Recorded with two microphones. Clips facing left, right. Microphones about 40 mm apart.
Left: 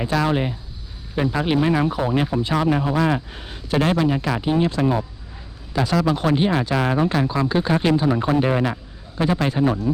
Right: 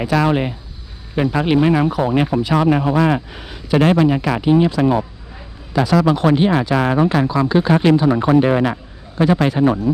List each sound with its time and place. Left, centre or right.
0.0 s speech: right
0.3 s speech: right
2.0 s speech: right
2.7 s speech: right
3.3 s speech: right